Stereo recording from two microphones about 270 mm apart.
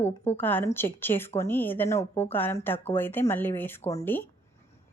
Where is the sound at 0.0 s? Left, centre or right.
Centre.